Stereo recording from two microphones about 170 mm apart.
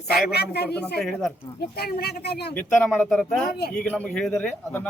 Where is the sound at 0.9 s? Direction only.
Centre (ahead or behind).